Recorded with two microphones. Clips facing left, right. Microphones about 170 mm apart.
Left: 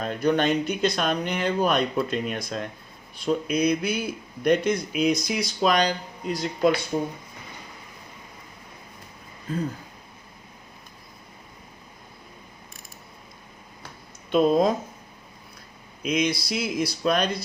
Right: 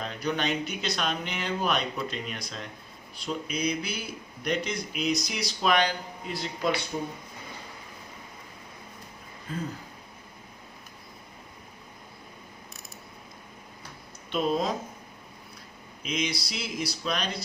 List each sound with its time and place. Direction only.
0.0 s speech: 50° left (ahead or behind)
5.6 s speech: 35° left (ahead or behind)
14.3 s speech: 45° left (ahead or behind)
16.2 s speech: 55° left (ahead or behind)